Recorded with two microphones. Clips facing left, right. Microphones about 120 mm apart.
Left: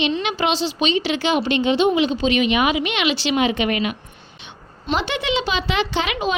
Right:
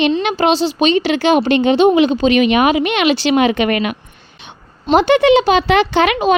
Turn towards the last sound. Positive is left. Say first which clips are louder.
# right 8 dB
turn(degrees=-55)  # may be behind; listen again after turning